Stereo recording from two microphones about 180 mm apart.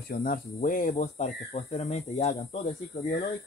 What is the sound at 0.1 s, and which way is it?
Speech, 50° left (ahead or behind).